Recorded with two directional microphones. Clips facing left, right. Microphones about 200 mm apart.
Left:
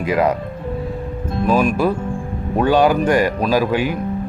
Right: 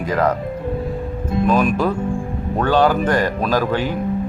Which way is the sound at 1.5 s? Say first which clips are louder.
Left 2 dB; 5° left (ahead or behind).